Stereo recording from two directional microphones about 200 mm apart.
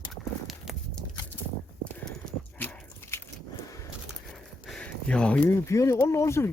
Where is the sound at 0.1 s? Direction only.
Centre (ahead or behind).